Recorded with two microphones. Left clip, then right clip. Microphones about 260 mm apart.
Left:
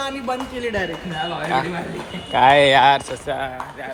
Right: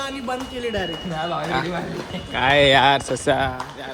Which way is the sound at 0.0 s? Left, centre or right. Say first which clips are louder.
Left 2 dB; centre.